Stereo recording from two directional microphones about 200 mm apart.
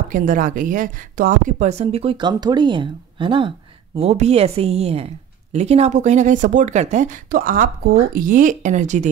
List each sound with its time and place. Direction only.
0.1 s speech: 40° right (ahead or behind)